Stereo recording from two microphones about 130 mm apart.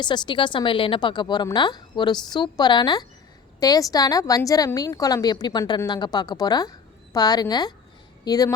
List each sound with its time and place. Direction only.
0.0 s a woman's voice: 35° left (ahead or behind)